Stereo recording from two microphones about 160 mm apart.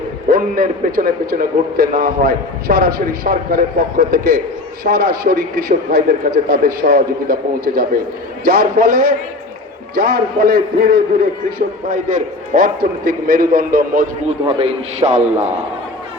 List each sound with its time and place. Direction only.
0.3 s a man's voice: 60° right (ahead or behind)
14.3 s a man's voice: 35° right (ahead or behind)